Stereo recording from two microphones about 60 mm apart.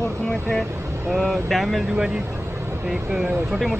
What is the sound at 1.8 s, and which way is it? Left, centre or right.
Speech, centre.